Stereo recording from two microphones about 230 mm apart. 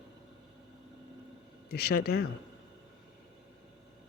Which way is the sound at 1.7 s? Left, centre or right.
Left.